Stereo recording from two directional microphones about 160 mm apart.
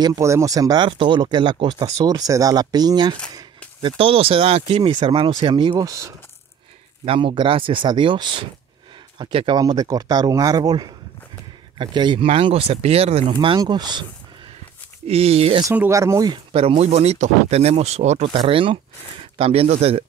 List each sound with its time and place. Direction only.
0.0 s speech: 20° right (ahead or behind)
7.1 s speech: 35° right (ahead or behind)
15.0 s speech: 40° right (ahead or behind)
15.7 s speech: 15° right (ahead or behind)
16.5 s speech: 40° right (ahead or behind)